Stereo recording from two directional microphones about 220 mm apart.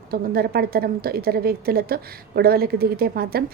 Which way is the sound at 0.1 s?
45° right (ahead or behind).